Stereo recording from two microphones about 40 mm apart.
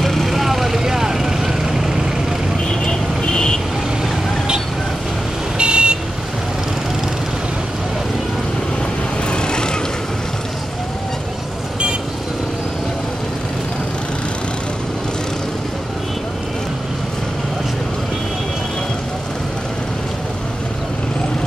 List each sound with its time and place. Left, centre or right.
0.0 s vehicle: centre
2.7 s vehicle: centre
5.6 s vehicle: right
9.3 s vehicle: left